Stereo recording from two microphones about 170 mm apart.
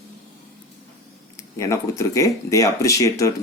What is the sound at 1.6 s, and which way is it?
Speech, 20° left (ahead or behind).